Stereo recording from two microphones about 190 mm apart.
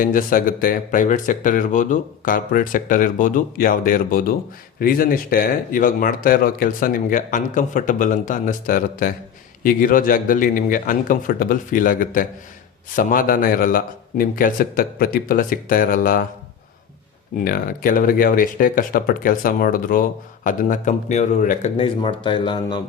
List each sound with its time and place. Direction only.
0.0 s speech: 45° left (ahead or behind)
17.4 s speech: 50° left (ahead or behind)
21.8 s speech: 30° left (ahead or behind)